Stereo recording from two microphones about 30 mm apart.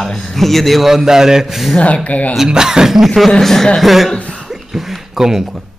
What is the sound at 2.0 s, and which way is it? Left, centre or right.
Speech, left.